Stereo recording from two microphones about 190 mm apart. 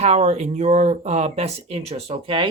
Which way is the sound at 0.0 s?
35° right (ahead or behind).